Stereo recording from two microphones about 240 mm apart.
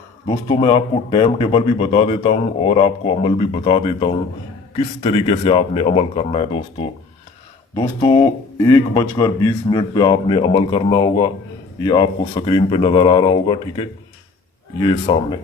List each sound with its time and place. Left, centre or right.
0.3 s speech: left
8.5 s speech: centre